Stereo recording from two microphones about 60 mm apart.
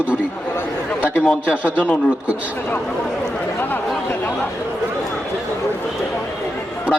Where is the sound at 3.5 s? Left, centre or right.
Left.